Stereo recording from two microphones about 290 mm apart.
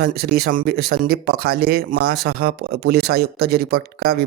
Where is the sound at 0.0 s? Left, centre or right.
Right.